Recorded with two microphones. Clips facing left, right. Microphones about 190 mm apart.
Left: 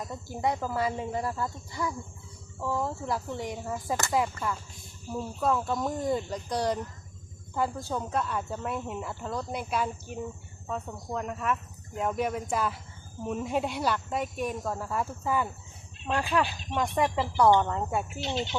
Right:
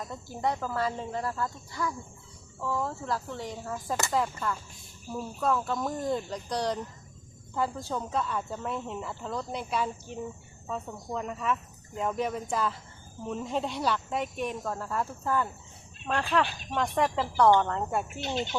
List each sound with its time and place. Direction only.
0.0 s speech: 10° left (ahead or behind)
18.2 s speech: 50° right (ahead or behind)